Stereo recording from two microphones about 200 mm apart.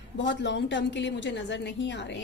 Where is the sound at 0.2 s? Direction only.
60° left (ahead or behind).